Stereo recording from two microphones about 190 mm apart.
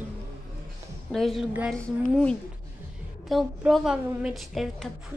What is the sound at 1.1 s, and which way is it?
A woman's voice, centre (ahead or behind).